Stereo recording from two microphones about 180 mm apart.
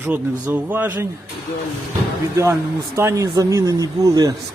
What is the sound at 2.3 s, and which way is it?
A man's voice, 15° right (ahead or behind).